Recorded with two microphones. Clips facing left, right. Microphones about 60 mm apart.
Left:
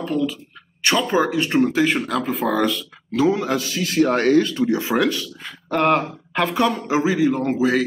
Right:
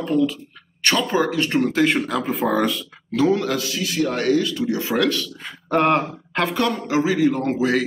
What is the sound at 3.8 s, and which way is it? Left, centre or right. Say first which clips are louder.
Speech: left 5 dB; left.